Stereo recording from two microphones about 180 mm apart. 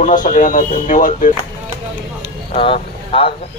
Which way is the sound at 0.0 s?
45° left (ahead or behind).